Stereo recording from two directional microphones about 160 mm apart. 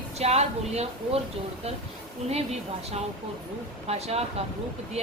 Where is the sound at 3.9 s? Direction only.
40° right (ahead or behind).